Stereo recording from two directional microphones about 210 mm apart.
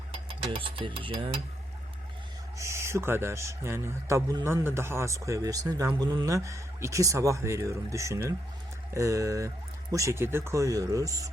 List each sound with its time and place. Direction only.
0.4 s music: 25° right (ahead or behind)
2.6 s a man's voice: 15° right (ahead or behind)